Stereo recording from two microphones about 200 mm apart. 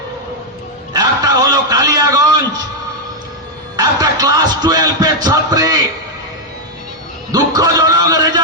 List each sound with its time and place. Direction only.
0.9 s a sound: 20° right (ahead or behind)
3.8 s speech: 20° right (ahead or behind)
7.3 s music: 20° right (ahead or behind)